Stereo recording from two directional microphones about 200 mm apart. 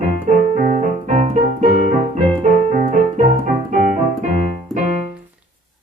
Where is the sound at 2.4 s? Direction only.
35° right (ahead or behind).